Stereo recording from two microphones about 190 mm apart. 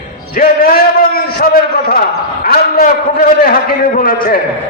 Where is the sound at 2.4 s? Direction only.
50° left (ahead or behind).